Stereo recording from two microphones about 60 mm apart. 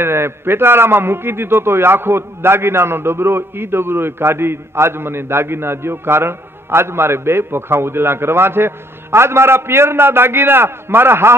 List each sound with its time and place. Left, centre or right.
0.0 s a man's voice: right